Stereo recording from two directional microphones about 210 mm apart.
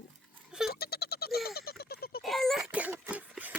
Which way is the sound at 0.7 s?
45° left (ahead or behind).